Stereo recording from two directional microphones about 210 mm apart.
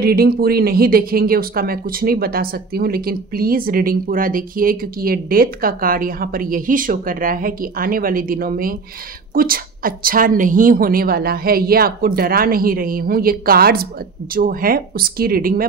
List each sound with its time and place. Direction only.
0.0 s speech: 45° right (ahead or behind)